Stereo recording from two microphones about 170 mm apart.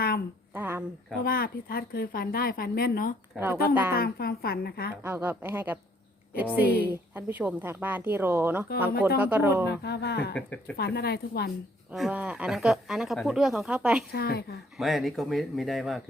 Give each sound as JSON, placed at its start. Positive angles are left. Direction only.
{"t": 0.5, "sound": "a sound", "side_deg": -10}
{"t": 1.2, "sound": "a woman's voice", "side_deg": 60}
{"t": 3.3, "sound": "a woman's voice", "side_deg": -15}
{"t": 3.7, "sound": "a woman's voice", "side_deg": 60}
{"t": 5.0, "sound": "a woman's voice", "side_deg": -10}
{"t": 9.6, "sound": "a woman's voice", "side_deg": 80}
{"t": 10.3, "sound": "speech", "side_deg": 10}
{"t": 10.8, "sound": "a woman's voice", "side_deg": 70}
{"t": 11.9, "sound": "speech", "side_deg": -5}
{"t": 14.1, "sound": "a woman's voice", "side_deg": 65}
{"t": 14.8, "sound": "speech", "side_deg": 0}